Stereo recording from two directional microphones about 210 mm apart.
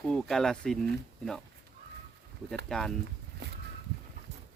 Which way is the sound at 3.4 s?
50° right (ahead or behind).